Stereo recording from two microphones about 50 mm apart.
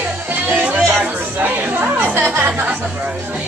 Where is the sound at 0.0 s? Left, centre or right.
Right.